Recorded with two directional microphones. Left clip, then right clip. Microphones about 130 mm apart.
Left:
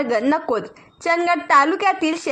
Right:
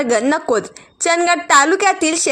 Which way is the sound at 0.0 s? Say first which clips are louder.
Right 3 dB; 35° right (ahead or behind).